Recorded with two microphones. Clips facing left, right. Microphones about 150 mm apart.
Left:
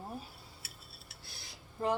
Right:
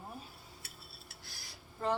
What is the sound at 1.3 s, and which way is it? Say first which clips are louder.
Cutlery: left 1 dB; 25° left (ahead or behind).